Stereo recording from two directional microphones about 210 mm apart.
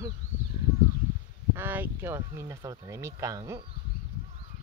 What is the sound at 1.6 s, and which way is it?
Speech, 10° right (ahead or behind).